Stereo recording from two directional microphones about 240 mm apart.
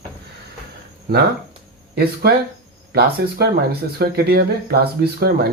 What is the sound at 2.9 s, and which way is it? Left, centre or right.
Speech, right.